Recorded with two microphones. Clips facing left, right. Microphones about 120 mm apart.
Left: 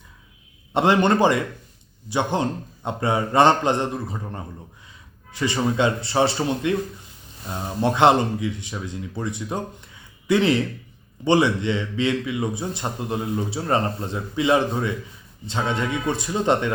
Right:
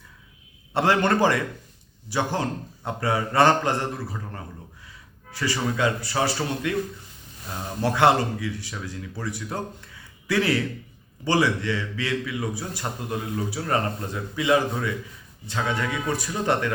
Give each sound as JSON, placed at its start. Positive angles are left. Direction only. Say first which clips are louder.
{"t": 0.7, "sound": "a man's voice", "louder": "left 3 dB", "side_deg": 20}